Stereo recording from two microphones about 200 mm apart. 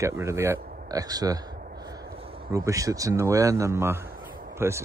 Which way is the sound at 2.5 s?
15° right (ahead or behind).